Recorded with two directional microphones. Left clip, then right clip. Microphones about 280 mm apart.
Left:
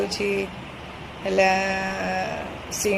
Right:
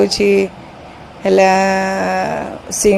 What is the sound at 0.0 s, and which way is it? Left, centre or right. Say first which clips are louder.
A woman's voice: right 12 dB; right.